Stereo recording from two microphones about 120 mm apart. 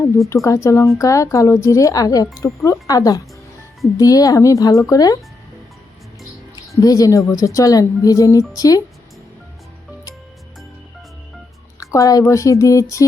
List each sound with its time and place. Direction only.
0.4 s a woman's voice: 25° left (ahead or behind)
6.8 s a woman's voice: 30° left (ahead or behind)
11.8 s a woman's voice: 25° left (ahead or behind)